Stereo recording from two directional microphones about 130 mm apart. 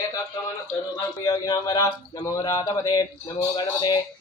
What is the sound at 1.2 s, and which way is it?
A man's voice, 25° left (ahead or behind).